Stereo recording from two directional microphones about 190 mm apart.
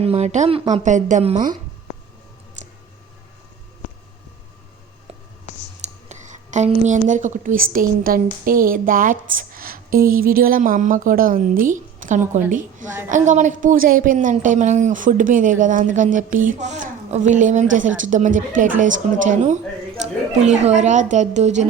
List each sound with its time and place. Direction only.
0.0 s a woman's voice: 35° right (ahead or behind)
5.8 s a woman's voice: 40° right (ahead or behind)
20.6 s a woman's voice: 35° right (ahead or behind)